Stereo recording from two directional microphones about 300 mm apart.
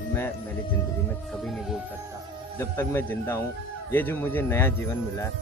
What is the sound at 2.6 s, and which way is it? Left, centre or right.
Speech, centre.